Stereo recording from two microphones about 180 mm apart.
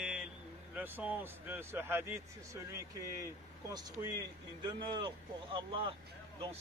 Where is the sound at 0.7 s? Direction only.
10° right (ahead or behind).